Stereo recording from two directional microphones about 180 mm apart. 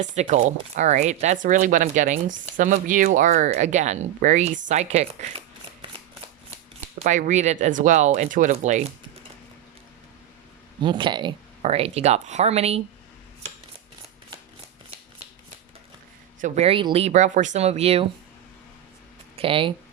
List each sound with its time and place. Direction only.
0.0 s speech: 40° right (ahead or behind)
7.0 s speech: 45° right (ahead or behind)
10.8 s speech: 25° right (ahead or behind)
16.4 s speech: 35° right (ahead or behind)
19.4 s speech: 30° right (ahead or behind)